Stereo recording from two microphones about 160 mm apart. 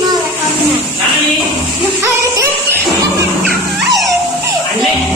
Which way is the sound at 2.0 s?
15° right (ahead or behind).